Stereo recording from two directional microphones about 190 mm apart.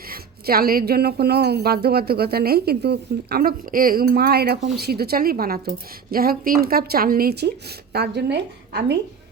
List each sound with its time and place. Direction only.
0.1 s a woman's voice: 50° right (ahead or behind)